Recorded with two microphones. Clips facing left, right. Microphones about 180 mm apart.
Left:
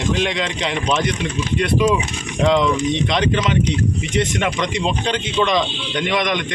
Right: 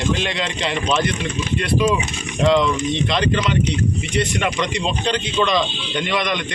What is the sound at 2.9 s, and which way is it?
Speech, 20° left (ahead or behind).